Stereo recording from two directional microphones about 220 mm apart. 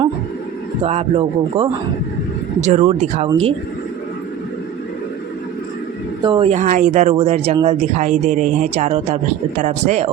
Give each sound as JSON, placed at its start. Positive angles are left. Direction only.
{"t": 0.9, "sound": "a man's voice", "side_deg": -25}
{"t": 6.2, "sound": "speech", "side_deg": -20}